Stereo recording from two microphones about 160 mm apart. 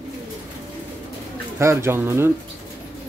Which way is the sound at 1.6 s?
15° right (ahead or behind).